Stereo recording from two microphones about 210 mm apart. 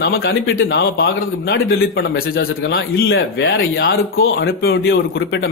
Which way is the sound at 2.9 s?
50° left (ahead or behind).